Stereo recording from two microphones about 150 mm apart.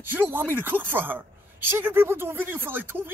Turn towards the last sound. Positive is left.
turn(degrees=-15)  # may be behind; listen again after turning